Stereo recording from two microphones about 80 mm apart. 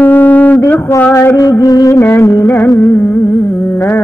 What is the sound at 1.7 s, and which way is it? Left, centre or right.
Music, left.